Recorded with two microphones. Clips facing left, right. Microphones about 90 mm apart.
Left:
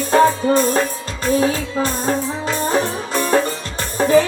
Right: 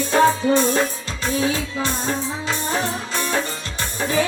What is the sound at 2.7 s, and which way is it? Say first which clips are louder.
Music: left 5 dB; 45° left (ahead or behind).